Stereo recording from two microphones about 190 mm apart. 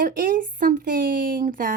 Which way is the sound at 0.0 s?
45° right (ahead or behind).